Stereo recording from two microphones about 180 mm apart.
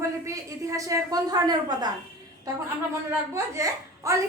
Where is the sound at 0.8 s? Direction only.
20° right (ahead or behind).